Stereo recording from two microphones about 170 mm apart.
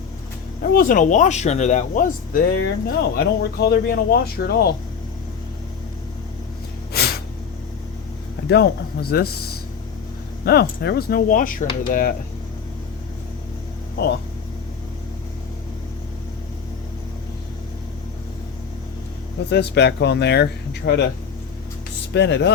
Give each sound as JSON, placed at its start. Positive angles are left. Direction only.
{"t": 0.6, "sound": "speech", "side_deg": 60}
{"t": 6.9, "sound": "snort", "side_deg": 65}
{"t": 8.4, "sound": "speech", "side_deg": 75}
{"t": 10.4, "sound": "speech", "side_deg": 70}
{"t": 19.5, "sound": "speech", "side_deg": 80}
{"t": 22.1, "sound": "speech", "side_deg": 90}